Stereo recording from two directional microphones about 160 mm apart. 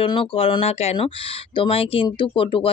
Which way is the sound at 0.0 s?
30° left (ahead or behind).